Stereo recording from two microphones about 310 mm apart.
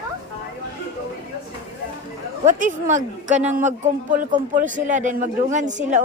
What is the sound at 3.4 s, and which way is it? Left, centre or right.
Speech, centre.